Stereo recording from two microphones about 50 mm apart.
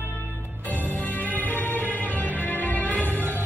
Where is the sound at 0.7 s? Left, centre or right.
Left.